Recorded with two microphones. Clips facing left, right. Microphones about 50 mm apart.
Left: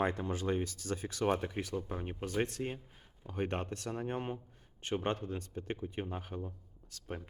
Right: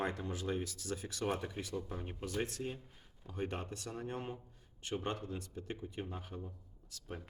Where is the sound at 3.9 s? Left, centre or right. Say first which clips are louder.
Left 4 dB; left.